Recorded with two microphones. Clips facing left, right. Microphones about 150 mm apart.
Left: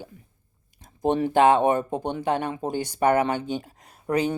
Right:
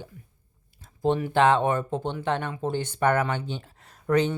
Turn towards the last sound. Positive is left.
turn(degrees=10)  # may be behind; listen again after turning